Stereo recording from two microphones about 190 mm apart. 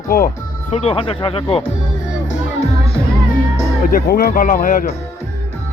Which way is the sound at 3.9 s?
50° left (ahead or behind).